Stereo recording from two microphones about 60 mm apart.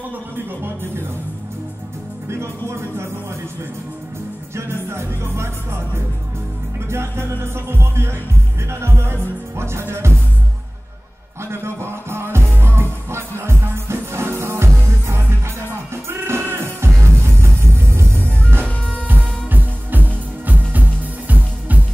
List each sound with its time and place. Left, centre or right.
2.2 s music: right
4.6 s music: right
6.9 s music: right
11.5 s music: right
18.5 s music: right